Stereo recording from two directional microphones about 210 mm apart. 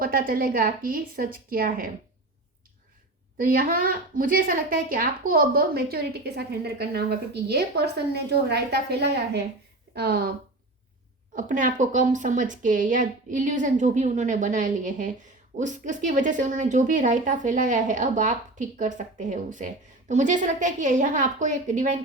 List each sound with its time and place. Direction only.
0.0 s a woman's voice: 40° right (ahead or behind)
3.3 s a woman's voice: 45° right (ahead or behind)
11.3 s a woman's voice: 40° right (ahead or behind)